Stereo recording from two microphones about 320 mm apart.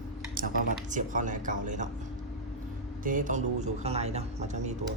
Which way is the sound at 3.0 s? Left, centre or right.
Right.